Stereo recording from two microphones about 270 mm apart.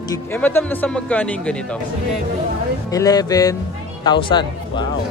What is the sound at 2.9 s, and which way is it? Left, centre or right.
Speech, centre.